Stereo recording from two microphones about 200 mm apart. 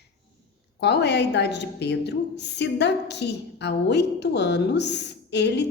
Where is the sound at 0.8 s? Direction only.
55° left (ahead or behind).